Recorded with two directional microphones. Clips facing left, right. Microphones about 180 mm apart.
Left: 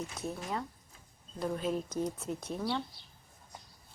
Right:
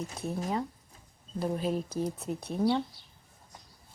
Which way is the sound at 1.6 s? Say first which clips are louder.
Right 2 dB; 30° right (ahead or behind).